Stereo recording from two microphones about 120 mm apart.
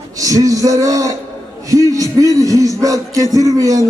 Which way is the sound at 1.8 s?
30° left (ahead or behind).